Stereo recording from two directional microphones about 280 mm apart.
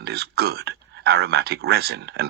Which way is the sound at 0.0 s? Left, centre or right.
Right.